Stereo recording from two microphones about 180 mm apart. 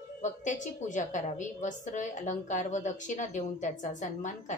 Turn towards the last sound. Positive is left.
turn(degrees=45)  # may be behind; listen again after turning